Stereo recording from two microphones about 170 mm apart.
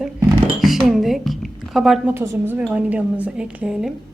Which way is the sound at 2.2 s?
10° right (ahead or behind).